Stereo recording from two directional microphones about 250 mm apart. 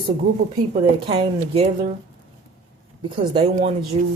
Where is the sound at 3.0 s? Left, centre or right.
Centre.